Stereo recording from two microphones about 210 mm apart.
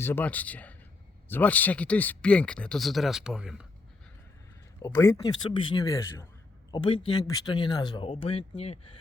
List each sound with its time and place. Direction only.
0.0 s speech: 10° left (ahead or behind)
4.8 s speech: 15° left (ahead or behind); by 9.0 s 30° left (ahead or behind)